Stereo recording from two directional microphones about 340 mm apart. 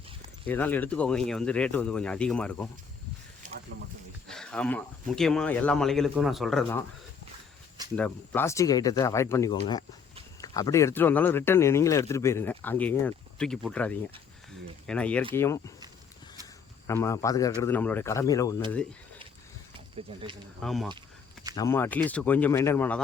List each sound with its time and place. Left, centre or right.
0.4 s speech: centre
3.4 s a sound: right
4.3 s speech: centre
7.9 s speech: centre
16.8 s speech: centre
20.6 s speech: centre